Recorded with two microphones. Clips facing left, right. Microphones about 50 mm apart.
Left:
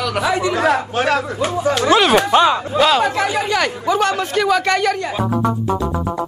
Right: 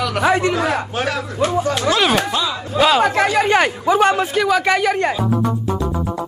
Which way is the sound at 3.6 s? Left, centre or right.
Centre.